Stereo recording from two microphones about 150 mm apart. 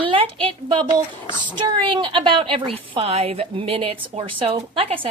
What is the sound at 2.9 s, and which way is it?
A woman's voice, 40° right (ahead or behind).